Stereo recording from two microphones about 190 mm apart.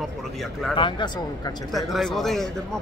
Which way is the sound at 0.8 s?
25° left (ahead or behind).